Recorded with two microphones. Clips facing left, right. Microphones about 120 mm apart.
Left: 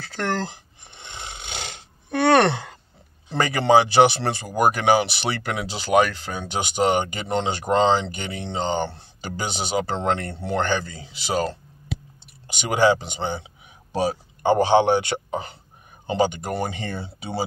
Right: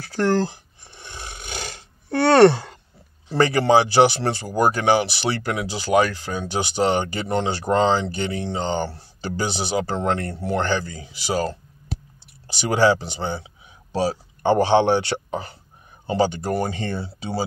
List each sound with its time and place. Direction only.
0.0 s snoring: 20° left (ahead or behind)
3.3 s speech: 20° left (ahead or behind)
12.4 s speech: 15° left (ahead or behind)